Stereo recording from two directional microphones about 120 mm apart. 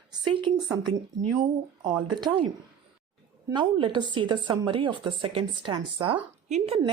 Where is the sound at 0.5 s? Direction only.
65° right (ahead or behind).